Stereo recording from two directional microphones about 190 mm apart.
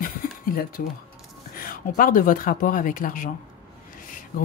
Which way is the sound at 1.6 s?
45° left (ahead or behind).